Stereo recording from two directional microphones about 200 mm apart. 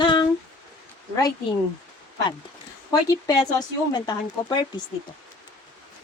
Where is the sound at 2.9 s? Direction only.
20° left (ahead or behind).